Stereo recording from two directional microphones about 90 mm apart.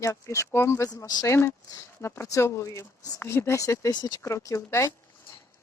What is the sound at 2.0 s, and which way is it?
Speech, 30° left (ahead or behind).